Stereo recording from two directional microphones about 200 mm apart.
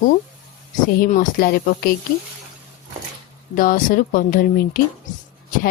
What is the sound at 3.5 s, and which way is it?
A woman's voice, 45° left (ahead or behind).